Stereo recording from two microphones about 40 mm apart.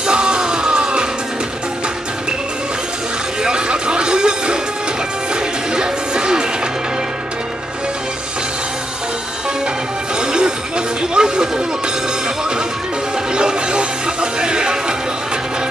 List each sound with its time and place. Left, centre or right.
0.0 s music: right
3.4 s music: right
5.8 s music: centre
11.1 s music: centre
13.4 s music: right